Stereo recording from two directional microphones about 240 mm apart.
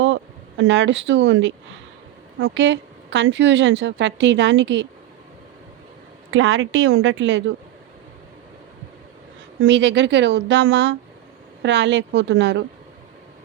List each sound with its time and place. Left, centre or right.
0.0 s a woman's voice: right
6.3 s a woman's voice: right
9.6 s a woman's voice: right